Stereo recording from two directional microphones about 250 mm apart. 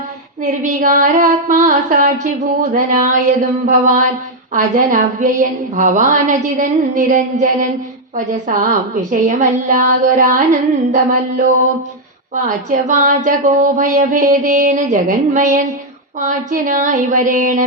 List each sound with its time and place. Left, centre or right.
0.6 s speech: right